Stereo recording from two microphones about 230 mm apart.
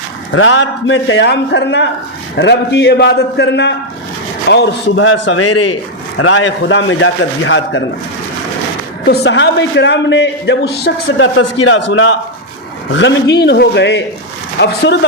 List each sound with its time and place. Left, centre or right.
0.3 s a man's voice: left
9.0 s a man's voice: left